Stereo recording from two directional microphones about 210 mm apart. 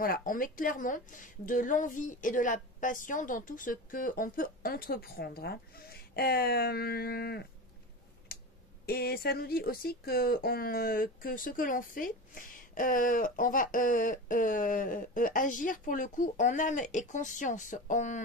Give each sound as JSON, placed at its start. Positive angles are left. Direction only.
{"t": 0.0, "sound": "speech", "side_deg": 40}
{"t": 8.3, "sound": "a sound", "side_deg": 45}
{"t": 8.8, "sound": "speech", "side_deg": 45}